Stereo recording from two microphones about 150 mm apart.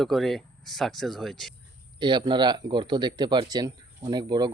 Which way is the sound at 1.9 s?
30° right (ahead or behind).